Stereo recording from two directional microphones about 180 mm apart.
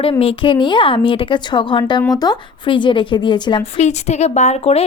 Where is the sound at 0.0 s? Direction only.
30° left (ahead or behind).